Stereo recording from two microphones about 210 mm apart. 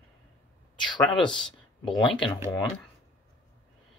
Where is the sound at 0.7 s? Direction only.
20° left (ahead or behind).